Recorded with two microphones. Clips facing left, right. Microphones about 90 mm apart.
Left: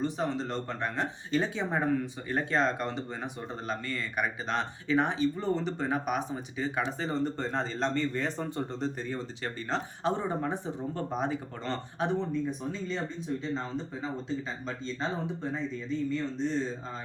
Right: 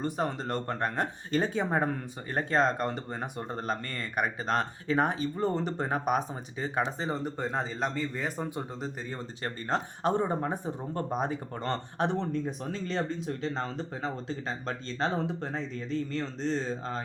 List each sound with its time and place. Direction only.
0.0 s speech: 50° right (ahead or behind); by 7.1 s 35° right (ahead or behind)
7.1 s a man's voice: 10° right (ahead or behind)
9.4 s speech: 45° right (ahead or behind)
12.8 s speech: 75° right (ahead or behind)